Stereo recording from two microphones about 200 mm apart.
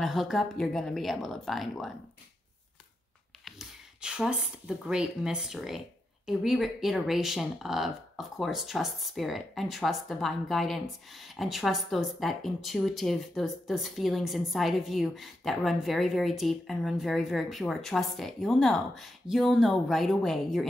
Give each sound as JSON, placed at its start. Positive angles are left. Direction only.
{"t": 0.0, "sound": "speech", "side_deg": 0}
{"t": 3.4, "sound": "speech", "side_deg": -5}